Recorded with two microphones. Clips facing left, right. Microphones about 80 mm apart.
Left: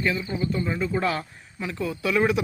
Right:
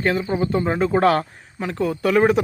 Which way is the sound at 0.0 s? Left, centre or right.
Right.